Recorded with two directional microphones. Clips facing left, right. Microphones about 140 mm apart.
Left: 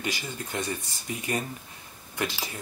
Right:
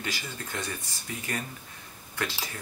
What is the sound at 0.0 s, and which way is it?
Speech, 15° left (ahead or behind).